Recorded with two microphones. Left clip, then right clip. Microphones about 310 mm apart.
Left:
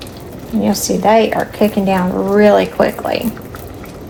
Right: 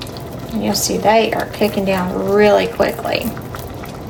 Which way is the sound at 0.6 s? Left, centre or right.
Centre.